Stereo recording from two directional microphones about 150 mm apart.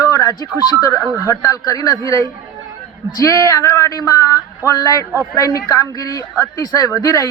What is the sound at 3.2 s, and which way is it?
Speech, 20° left (ahead or behind).